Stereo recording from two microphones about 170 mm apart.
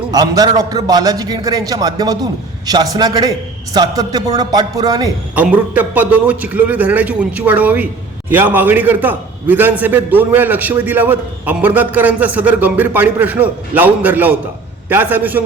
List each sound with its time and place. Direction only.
0.1 s a man's voice: 20° right (ahead or behind)
5.3 s a man's voice: 10° right (ahead or behind)